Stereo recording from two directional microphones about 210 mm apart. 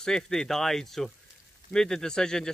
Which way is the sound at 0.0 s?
5° left (ahead or behind).